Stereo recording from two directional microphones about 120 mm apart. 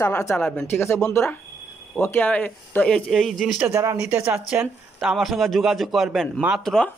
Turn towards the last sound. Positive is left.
turn(degrees=5)  # may be behind; listen again after turning